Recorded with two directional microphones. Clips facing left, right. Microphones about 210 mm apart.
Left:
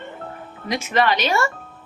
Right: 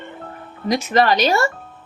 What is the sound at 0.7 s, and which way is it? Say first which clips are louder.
Speech: right 4 dB; 40° right (ahead or behind).